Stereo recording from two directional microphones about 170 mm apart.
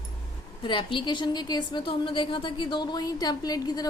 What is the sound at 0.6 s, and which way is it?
A woman's voice, 30° left (ahead or behind).